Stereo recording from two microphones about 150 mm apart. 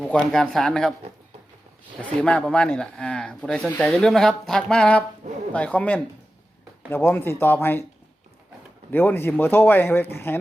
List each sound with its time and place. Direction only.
0.0 s speech: 5° left (ahead or behind)
2.1 s speech: 5° left (ahead or behind)
5.2 s a sound: 50° right (ahead or behind)
5.5 s speech: 10° left (ahead or behind)
8.9 s speech: 15° left (ahead or behind)